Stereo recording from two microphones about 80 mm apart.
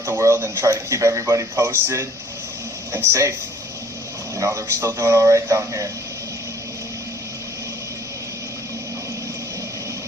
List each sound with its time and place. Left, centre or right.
0.0 s speech: right
4.4 s speech: right